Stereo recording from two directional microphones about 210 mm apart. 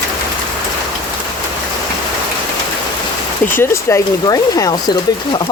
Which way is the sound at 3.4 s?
10° left (ahead or behind).